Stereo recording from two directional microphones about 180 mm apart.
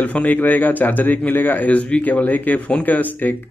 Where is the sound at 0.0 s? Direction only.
10° left (ahead or behind).